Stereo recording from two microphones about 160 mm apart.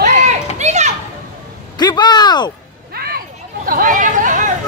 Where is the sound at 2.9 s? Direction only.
70° right (ahead or behind).